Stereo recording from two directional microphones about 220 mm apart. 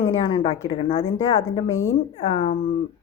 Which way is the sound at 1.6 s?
65° left (ahead or behind).